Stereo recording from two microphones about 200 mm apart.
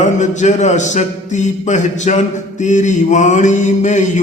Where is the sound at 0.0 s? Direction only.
35° left (ahead or behind).